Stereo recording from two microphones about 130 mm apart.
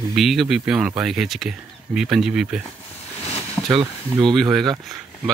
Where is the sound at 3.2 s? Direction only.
50° left (ahead or behind).